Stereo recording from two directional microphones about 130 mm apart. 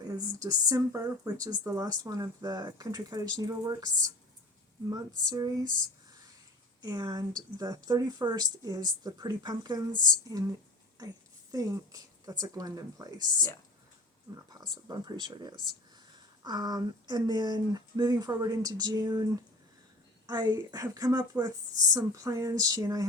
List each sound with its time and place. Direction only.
0.1 s speech: 25° right (ahead or behind)
6.8 s speech: 30° right (ahead or behind)
14.8 s speech: 35° right (ahead or behind)